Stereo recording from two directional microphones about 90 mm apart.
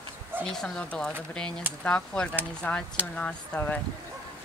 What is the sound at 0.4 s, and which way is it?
Speech, 10° left (ahead or behind).